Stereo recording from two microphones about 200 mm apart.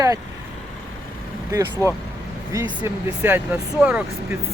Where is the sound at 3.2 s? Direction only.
10° right (ahead or behind).